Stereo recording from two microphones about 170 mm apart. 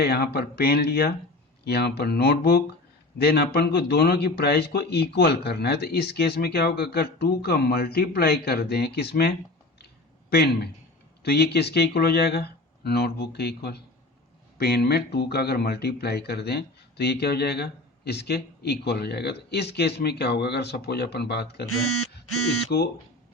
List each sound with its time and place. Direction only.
0.0 s a man's voice: 70° left (ahead or behind)
22.7 s a man's voice: 75° left (ahead or behind)